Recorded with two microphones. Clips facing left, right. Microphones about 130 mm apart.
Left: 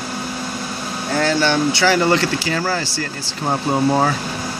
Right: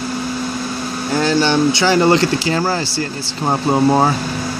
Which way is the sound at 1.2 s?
20° right (ahead or behind).